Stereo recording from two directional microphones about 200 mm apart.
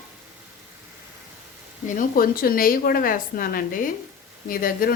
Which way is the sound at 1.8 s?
45° left (ahead or behind).